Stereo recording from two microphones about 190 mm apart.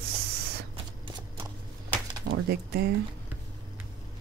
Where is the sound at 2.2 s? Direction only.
60° right (ahead or behind).